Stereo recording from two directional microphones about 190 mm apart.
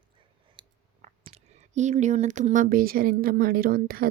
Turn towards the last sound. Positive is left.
turn(degrees=-50)  # may be behind; listen again after turning